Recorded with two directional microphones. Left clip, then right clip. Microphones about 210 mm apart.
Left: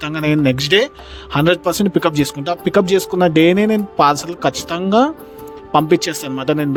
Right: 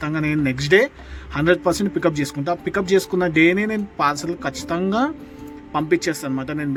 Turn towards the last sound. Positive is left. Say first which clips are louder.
# left 7 dB
turn(degrees=45)  # may be behind; listen again after turning